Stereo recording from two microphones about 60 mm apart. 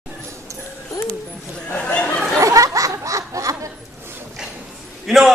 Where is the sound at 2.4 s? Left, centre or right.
Right.